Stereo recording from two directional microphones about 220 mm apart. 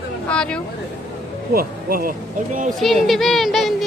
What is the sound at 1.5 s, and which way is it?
Speech, 40° right (ahead or behind).